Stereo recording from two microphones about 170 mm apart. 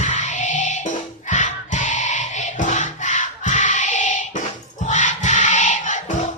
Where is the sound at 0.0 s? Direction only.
45° left (ahead or behind).